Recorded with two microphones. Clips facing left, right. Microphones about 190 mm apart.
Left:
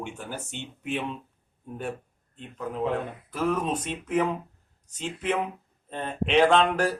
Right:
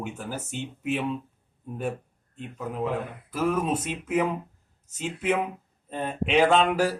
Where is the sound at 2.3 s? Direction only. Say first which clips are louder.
Even; 5° right (ahead or behind).